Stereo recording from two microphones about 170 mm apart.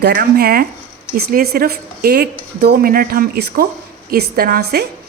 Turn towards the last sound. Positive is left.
turn(degrees=-65)  # may be behind; listen again after turning